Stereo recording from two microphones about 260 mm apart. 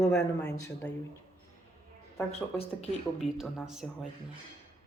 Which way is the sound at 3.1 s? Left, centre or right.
Centre.